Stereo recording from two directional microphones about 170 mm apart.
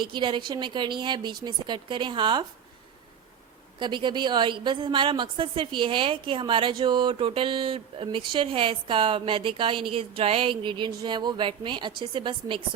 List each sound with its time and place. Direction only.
0.0 s a woman's voice: 30° right (ahead or behind)
3.8 s a woman's voice: 25° right (ahead or behind)